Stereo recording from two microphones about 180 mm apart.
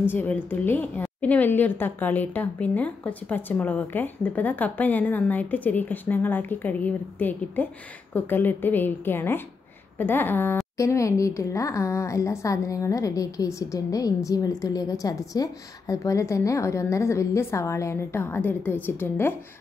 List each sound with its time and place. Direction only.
0.1 s a woman's voice: 10° left (ahead or behind)